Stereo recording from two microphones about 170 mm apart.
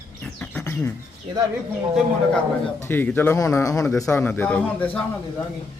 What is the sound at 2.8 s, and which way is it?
A man's voice, 10° left (ahead or behind).